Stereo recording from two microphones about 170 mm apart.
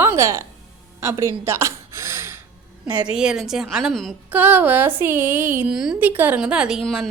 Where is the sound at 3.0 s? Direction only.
5° right (ahead or behind).